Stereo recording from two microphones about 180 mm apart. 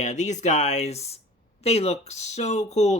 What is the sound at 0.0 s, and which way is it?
Speech, 40° left (ahead or behind).